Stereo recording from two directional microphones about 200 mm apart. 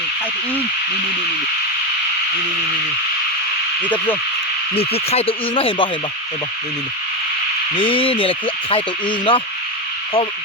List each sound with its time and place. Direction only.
3.8 s speech: 10° left (ahead or behind)
4.7 s speech: 30° left (ahead or behind)
7.8 s speech: 25° left (ahead or behind)